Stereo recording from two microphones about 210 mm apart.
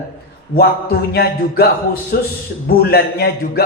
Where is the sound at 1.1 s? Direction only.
50° left (ahead or behind).